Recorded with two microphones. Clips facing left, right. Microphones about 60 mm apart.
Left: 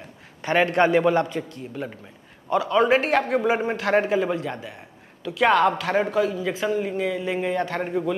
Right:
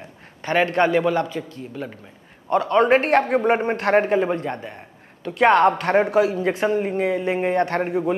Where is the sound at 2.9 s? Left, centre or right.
Right.